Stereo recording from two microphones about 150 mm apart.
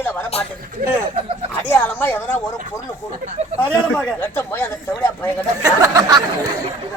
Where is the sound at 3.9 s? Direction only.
10° left (ahead or behind).